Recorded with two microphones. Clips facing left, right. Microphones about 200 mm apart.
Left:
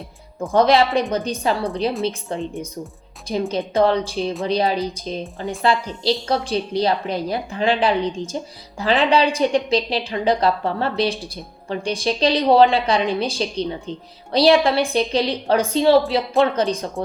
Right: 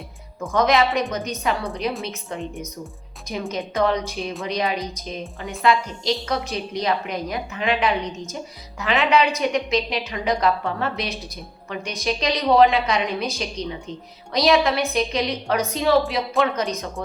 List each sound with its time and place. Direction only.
0.3 s a woman's voice: 30° left (ahead or behind)